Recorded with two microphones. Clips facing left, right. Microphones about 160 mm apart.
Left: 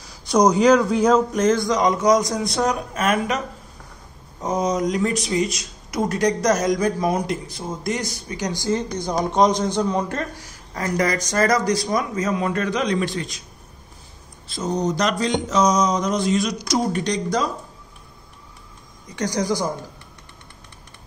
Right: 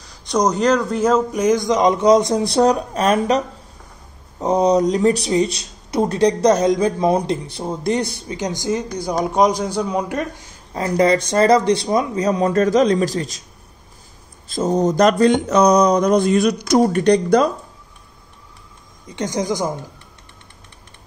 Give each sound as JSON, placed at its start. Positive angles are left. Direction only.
{"t": 0.2, "sound": "a man's voice", "side_deg": 5}
{"t": 8.1, "sound": "a man's voice", "side_deg": -25}
{"t": 14.5, "sound": "a sound", "side_deg": -50}
{"t": 19.1, "sound": "a man's voice", "side_deg": -20}